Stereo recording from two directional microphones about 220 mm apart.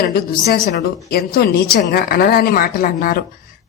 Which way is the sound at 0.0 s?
45° left (ahead or behind).